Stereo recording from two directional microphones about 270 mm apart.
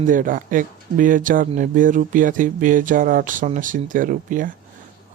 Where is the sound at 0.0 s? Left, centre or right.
Right.